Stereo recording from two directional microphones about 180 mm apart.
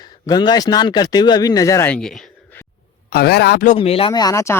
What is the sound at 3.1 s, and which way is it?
Speech, 60° left (ahead or behind).